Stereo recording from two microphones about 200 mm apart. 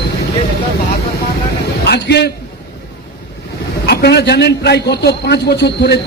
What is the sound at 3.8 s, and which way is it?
A man's voice, 55° left (ahead or behind).